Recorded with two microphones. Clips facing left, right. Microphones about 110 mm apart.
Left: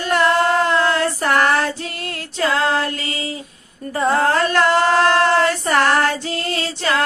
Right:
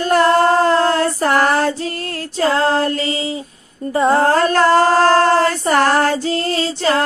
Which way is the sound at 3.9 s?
25° right (ahead or behind).